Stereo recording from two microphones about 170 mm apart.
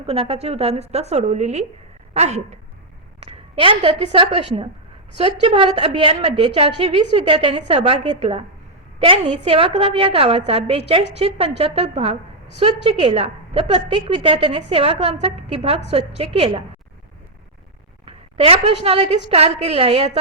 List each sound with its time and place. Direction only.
0.0 s a woman's voice: 35° right (ahead or behind)
18.0 s a woman's voice: 35° right (ahead or behind)